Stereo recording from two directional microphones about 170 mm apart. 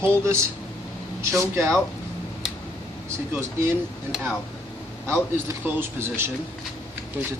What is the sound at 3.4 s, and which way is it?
Speech, 15° right (ahead or behind).